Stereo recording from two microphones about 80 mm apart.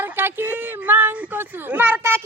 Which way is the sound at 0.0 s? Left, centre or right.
Right.